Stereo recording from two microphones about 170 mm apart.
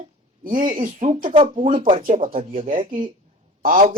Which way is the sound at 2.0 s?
55° right (ahead or behind).